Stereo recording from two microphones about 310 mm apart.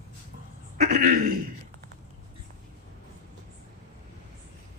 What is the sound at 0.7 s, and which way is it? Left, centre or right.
Speech, right.